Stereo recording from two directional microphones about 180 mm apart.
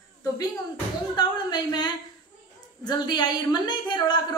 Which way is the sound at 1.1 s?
25° left (ahead or behind).